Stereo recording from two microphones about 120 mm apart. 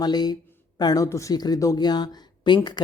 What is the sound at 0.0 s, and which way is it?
Speech, 35° left (ahead or behind).